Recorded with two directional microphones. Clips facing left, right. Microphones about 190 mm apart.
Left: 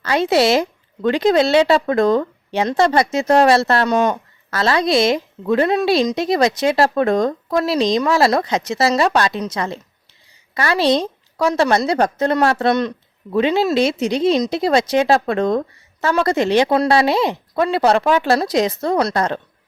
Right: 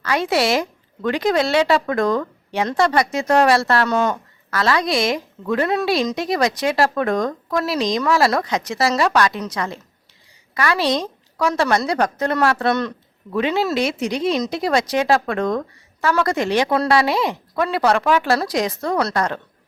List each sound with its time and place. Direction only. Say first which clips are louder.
0.0 s a woman's voice: left 4 dB; 25° left (ahead or behind)